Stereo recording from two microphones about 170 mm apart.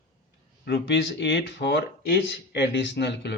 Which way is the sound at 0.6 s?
85° left.